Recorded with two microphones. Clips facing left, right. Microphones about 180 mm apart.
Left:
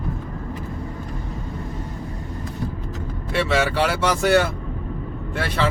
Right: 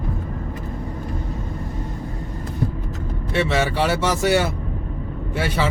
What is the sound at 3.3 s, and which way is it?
A man's voice, centre (ahead or behind).